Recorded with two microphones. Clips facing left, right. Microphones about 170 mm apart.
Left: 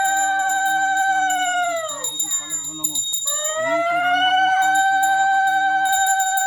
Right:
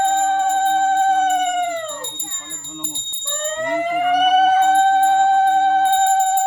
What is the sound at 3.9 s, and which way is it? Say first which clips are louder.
Emergency vehicle: right 3 dB; 35° right (ahead or behind).